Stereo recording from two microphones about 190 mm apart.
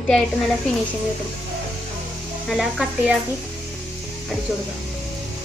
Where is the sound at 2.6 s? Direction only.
5° right (ahead or behind).